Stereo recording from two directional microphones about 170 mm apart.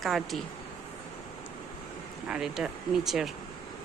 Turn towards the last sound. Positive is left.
turn(degrees=0)  # may be behind; listen again after turning